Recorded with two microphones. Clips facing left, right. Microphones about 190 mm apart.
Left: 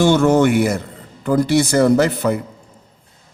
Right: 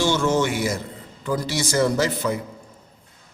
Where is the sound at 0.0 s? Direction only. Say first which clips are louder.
Left 7 dB; 60° left (ahead or behind).